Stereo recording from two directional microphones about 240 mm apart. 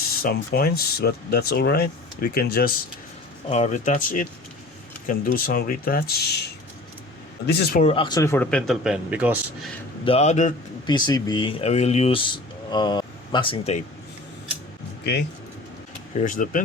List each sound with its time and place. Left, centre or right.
0.2 s speech: left
3.5 s speech: left
7.4 s speech: left
7.9 s speech: centre
10.0 s speech: left
10.8 s speech: centre
16.2 s speech: left